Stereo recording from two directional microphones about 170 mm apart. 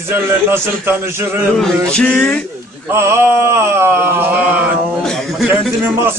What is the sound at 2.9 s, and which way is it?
Music, 15° right (ahead or behind).